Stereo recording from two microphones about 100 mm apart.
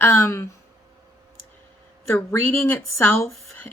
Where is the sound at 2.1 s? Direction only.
25° left (ahead or behind).